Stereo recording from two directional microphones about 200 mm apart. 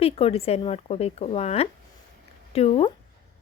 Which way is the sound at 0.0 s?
30° left (ahead or behind).